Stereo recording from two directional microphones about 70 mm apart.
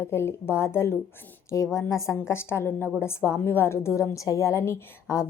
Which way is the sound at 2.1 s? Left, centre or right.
Left.